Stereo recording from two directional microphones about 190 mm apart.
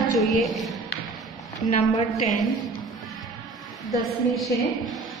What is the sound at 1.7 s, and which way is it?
Speech, 35° left (ahead or behind).